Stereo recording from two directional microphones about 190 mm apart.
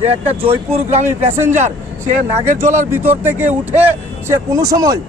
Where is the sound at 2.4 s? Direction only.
35° right (ahead or behind).